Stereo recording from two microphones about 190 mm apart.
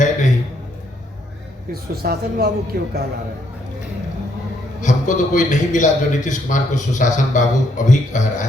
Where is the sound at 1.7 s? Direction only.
55° right (ahead or behind).